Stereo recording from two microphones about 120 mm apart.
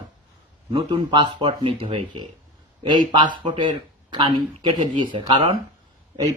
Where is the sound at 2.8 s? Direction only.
40° right (ahead or behind).